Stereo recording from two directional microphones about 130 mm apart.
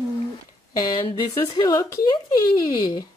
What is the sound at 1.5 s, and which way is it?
Speech, 30° left (ahead or behind).